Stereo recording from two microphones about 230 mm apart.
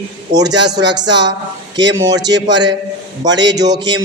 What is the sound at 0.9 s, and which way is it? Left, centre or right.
Speech, right.